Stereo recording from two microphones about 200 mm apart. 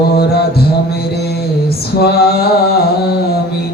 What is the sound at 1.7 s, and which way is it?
Female singing, 50° left (ahead or behind).